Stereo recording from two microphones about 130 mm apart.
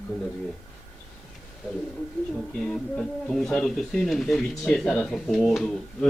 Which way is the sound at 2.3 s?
5° left (ahead or behind).